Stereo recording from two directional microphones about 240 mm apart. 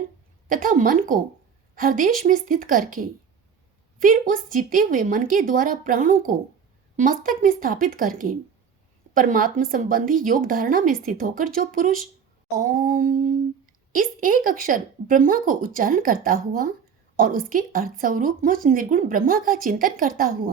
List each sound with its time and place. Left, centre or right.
0.4 s a woman's voice: right